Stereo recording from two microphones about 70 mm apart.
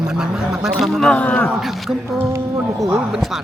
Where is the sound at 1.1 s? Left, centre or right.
Centre.